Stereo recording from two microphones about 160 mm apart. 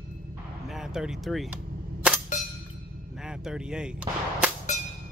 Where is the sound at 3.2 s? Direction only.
5° right (ahead or behind).